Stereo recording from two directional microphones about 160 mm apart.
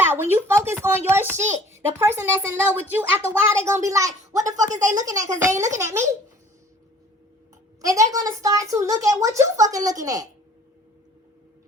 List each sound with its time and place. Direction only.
0.0 s a child's voice: 15° right (ahead or behind)
7.8 s a woman's voice: 20° right (ahead or behind)